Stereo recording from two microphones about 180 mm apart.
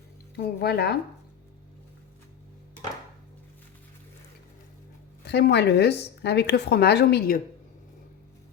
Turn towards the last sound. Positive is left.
turn(degrees=65)  # may be behind; listen again after turning